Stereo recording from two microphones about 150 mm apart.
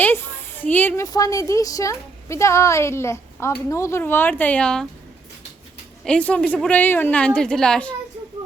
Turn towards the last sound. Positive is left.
turn(degrees=5)  # may be behind; listen again after turning